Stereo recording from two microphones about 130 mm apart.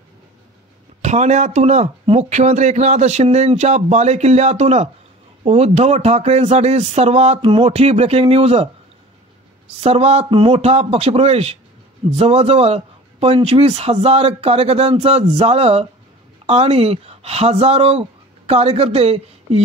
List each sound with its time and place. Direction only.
1.0 s speech: 60° right (ahead or behind)
9.8 s speech: 55° right (ahead or behind)